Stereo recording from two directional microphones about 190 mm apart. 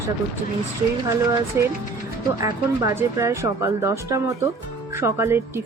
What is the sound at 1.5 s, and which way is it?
Speech, 15° right (ahead or behind).